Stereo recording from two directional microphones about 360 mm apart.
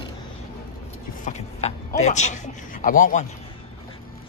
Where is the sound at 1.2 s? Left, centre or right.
Centre.